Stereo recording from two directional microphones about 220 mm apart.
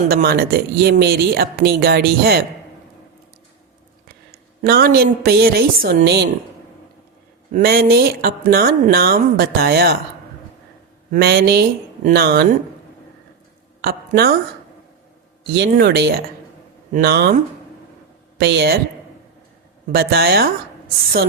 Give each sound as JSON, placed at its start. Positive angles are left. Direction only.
{"t": 0.1, "sound": "speech", "side_deg": -45}
{"t": 4.6, "sound": "speech", "side_deg": -45}
{"t": 7.5, "sound": "speech", "side_deg": -45}
{"t": 11.1, "sound": "speech", "side_deg": -45}
{"t": 13.8, "sound": "speech", "side_deg": -45}
{"t": 15.5, "sound": "speech", "side_deg": -50}
{"t": 19.9, "sound": "speech", "side_deg": -45}